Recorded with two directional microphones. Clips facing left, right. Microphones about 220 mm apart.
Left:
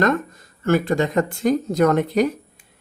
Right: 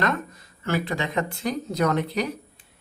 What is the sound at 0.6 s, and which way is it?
Speech, 45° left (ahead or behind).